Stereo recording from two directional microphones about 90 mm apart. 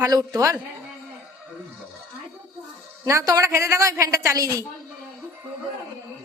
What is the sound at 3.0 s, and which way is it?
A woman's voice, 40° right (ahead or behind).